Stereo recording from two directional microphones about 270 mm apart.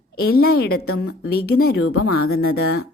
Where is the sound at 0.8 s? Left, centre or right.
Left.